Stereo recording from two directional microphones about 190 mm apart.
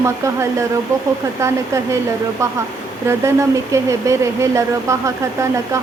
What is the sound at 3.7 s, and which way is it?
Speech, 15° right (ahead or behind).